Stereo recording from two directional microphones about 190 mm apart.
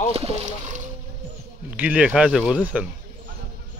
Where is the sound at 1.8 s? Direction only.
10° right (ahead or behind).